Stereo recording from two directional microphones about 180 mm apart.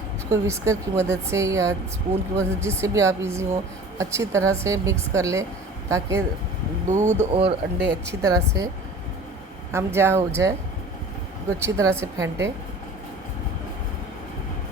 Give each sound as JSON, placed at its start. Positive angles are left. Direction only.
{"t": 0.3, "sound": "speech", "side_deg": -15}
{"t": 6.8, "sound": "speech", "side_deg": -40}
{"t": 7.9, "sound": "speech", "side_deg": -15}
{"t": 9.7, "sound": "speech", "side_deg": -15}
{"t": 11.6, "sound": "speech", "side_deg": -15}